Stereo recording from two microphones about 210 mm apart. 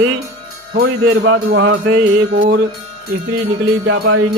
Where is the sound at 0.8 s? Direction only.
60° right (ahead or behind).